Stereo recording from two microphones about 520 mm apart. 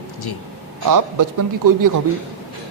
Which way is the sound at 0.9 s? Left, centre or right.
Right.